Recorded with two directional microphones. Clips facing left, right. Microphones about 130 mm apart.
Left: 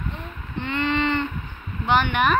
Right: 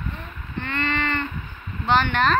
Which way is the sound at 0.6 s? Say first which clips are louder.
Left 3 dB; 15° left (ahead or behind).